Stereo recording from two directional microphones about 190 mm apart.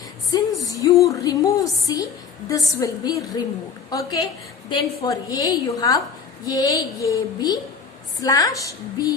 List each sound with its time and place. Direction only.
0.3 s music: 20° left (ahead or behind)
0.7 s a sound: 20° left (ahead or behind)
2.5 s a woman's voice: 15° left (ahead or behind)